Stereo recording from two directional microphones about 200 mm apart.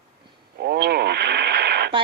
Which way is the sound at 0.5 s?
55° right (ahead or behind).